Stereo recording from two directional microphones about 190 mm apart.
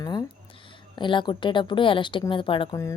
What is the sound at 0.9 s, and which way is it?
Speech, 25° left (ahead or behind).